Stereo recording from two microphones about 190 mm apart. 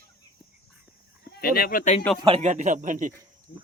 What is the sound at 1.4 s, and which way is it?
Speech, 55° left (ahead or behind).